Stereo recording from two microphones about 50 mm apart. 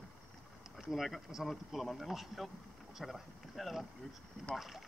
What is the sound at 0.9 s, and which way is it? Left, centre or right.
Speech, centre.